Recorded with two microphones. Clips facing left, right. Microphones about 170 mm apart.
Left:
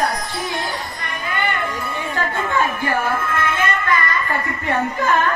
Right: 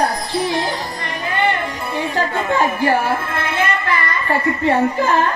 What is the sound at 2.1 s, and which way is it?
Music, 35° right (ahead or behind).